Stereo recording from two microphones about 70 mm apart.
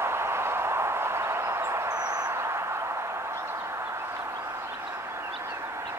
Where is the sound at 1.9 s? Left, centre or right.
Right.